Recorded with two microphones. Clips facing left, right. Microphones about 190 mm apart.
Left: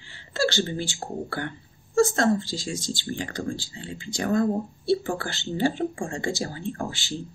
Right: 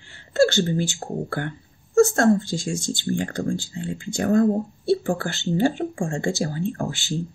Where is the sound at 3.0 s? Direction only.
50° right (ahead or behind).